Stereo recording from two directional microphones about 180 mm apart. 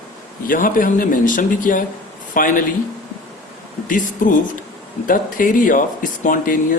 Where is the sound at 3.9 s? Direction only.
45° left (ahead or behind).